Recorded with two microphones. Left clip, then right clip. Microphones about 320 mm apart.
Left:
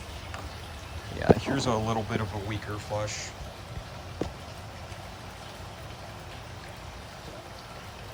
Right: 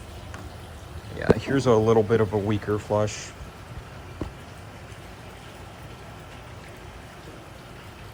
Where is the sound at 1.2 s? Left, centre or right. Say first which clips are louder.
Right 2 dB; centre.